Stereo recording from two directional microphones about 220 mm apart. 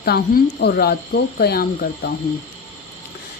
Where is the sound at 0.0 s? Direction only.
45° left (ahead or behind).